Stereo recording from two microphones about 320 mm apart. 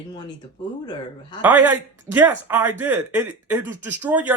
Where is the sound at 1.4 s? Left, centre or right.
Centre.